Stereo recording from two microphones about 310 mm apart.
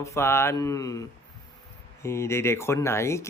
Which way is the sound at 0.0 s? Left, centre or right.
Centre.